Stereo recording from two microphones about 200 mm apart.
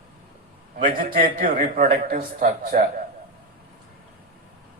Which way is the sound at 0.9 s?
45° right (ahead or behind).